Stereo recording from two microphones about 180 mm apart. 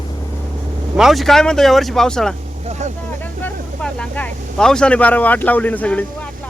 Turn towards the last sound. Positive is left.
turn(degrees=10)  # may be behind; listen again after turning